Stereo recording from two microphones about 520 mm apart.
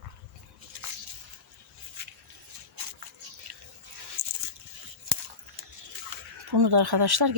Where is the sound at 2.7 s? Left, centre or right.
Right.